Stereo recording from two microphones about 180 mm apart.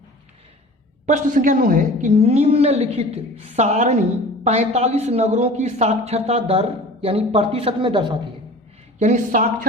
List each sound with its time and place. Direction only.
1.0 s a woman's voice: 45° right (ahead or behind); by 8.1 s 25° right (ahead or behind)
9.0 s a woman's voice: 45° right (ahead or behind)